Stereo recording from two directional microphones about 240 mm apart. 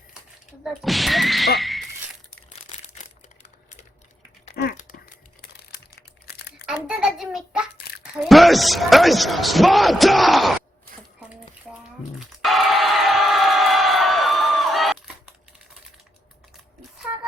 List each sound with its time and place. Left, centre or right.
0.6 s speech: centre
1.5 s a sound: centre
4.5 s crumpling: left
6.7 s a child's voice: centre
11.7 s a sound: centre
12.4 s crowd: centre